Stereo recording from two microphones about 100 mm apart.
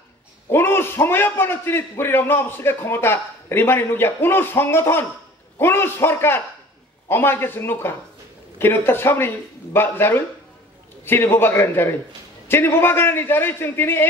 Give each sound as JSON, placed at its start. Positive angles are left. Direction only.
{"t": 0.5, "sound": "a man's voice", "side_deg": 25}